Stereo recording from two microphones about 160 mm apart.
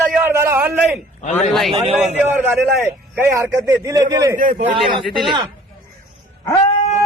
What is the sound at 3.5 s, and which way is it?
Speech, 15° right (ahead or behind).